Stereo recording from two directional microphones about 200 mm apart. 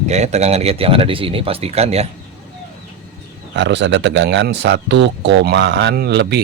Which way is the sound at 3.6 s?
60° right (ahead or behind).